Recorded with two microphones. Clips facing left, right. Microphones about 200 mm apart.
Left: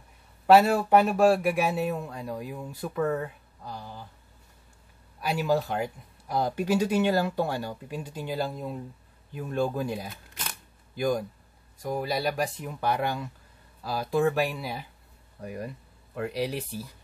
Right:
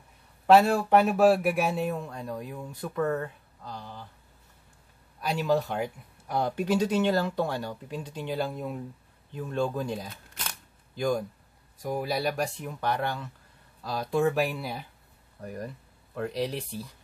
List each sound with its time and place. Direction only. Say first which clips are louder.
0.5 s a man's voice: left 1 dB; 5° left (ahead or behind)
5.2 s a man's voice: even; 5° left (ahead or behind)